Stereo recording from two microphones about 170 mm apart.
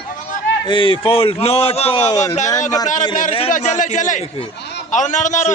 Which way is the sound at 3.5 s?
45° left (ahead or behind).